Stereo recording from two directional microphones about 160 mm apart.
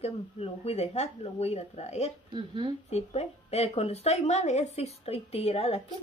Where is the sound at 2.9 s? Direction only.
40° left (ahead or behind).